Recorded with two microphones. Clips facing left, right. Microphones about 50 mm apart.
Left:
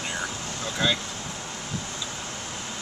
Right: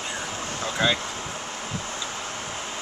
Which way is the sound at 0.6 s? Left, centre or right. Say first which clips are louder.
Right 2 dB; centre.